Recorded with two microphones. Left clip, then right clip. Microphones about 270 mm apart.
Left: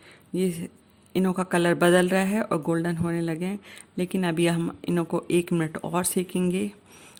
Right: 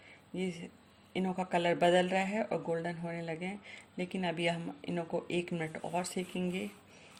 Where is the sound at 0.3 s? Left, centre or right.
Left.